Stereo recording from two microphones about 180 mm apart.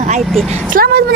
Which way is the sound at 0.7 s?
55° right (ahead or behind).